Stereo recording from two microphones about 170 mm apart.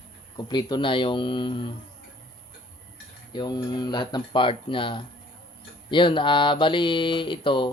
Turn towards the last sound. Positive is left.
turn(degrees=30)  # may be behind; listen again after turning